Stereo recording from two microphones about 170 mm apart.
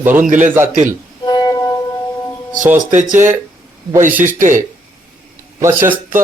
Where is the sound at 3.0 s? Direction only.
45° right (ahead or behind).